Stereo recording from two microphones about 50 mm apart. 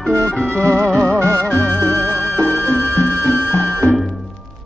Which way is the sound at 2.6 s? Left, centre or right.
Left.